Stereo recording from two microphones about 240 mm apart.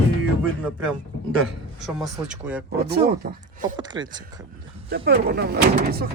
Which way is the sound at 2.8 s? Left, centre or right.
Right.